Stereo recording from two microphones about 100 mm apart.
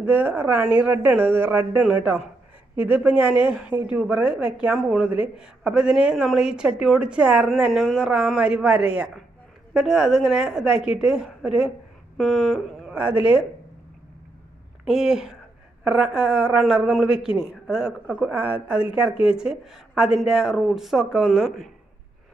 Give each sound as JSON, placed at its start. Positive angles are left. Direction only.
{"t": 0.0, "sound": "speech", "side_deg": -15}
{"t": 13.2, "sound": "speech", "side_deg": -10}
{"t": 14.9, "sound": "speech", "side_deg": -5}